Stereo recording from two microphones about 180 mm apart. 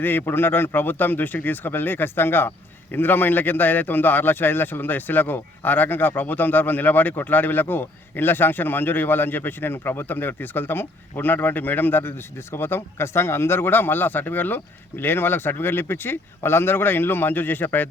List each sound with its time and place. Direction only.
0.0 s a man's voice: 10° left (ahead or behind)